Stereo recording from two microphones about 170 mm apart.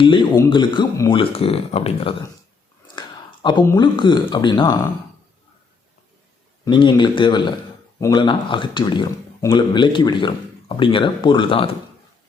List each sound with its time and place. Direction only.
0.0 s speech: 30° left (ahead or behind)
3.4 s speech: 25° left (ahead or behind)
6.7 s speech: 30° left (ahead or behind)